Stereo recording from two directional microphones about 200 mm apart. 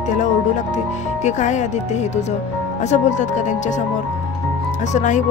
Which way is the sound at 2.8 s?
35° left (ahead or behind).